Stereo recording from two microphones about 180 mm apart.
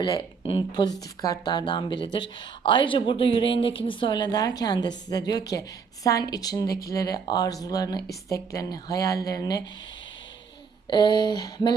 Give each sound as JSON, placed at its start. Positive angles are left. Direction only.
{"t": 0.0, "sound": "speech", "side_deg": 25}
{"t": 10.8, "sound": "speech", "side_deg": 25}